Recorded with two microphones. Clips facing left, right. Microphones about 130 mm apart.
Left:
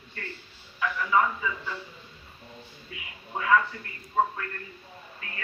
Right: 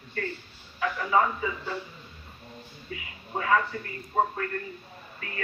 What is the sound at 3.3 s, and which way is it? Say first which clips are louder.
A man's voice: left 1 dB; 40° right (ahead or behind).